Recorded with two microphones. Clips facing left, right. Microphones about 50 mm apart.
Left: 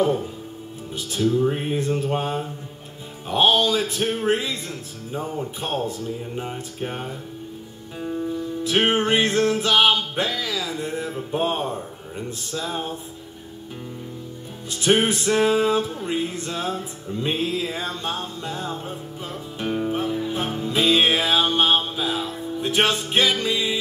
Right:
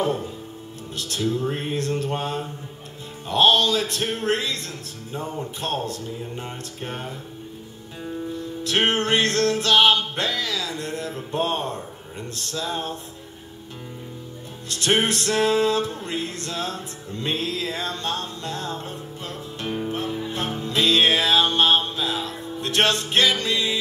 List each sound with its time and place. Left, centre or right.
0.0 s speech: centre
0.9 s music: centre
8.6 s music: centre
14.7 s music: centre